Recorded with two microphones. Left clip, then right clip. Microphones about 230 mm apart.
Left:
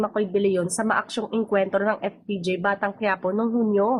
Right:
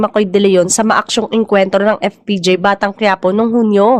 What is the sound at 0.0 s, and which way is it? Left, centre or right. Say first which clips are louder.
A woman's voice: right 11 dB; right.